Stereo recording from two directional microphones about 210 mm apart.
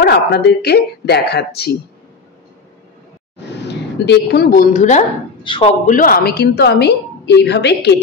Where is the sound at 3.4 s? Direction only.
55° left (ahead or behind); by 5.0 s 35° left (ahead or behind).